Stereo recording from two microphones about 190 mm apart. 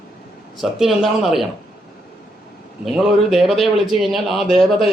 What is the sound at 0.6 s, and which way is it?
Speech, centre (ahead or behind).